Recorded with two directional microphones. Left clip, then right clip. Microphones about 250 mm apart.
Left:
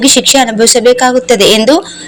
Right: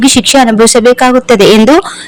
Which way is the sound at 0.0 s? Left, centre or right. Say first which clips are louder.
Right 1 dB; right.